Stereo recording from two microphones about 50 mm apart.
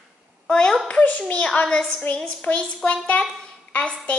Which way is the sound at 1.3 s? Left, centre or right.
Left.